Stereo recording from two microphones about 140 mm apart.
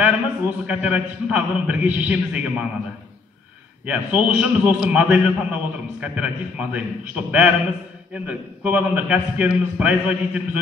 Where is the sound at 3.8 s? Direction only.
10° right (ahead or behind).